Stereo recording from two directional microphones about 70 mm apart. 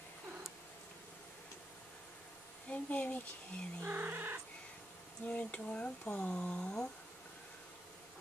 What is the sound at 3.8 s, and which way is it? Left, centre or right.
Speech, right.